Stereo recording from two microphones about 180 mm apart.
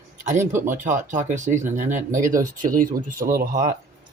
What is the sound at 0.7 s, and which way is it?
Speech, 45° right (ahead or behind).